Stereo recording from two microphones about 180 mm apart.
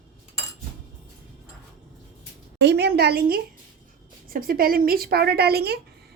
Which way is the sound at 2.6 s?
70° right (ahead or behind).